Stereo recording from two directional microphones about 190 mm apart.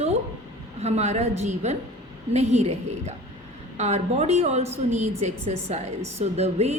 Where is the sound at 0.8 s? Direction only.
35° right (ahead or behind).